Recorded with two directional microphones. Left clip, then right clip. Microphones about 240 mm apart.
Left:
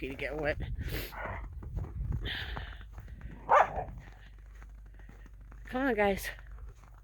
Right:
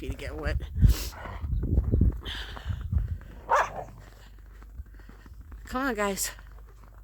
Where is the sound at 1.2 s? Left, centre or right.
Centre.